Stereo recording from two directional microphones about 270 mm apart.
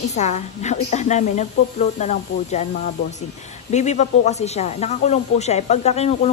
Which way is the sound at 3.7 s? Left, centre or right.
Left.